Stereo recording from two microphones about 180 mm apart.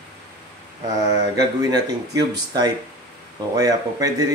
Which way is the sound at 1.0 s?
20° right (ahead or behind).